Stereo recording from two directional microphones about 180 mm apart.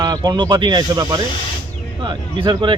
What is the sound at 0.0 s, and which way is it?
Speech, 20° right (ahead or behind).